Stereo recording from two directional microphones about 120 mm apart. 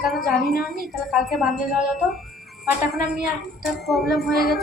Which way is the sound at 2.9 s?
Centre (ahead or behind).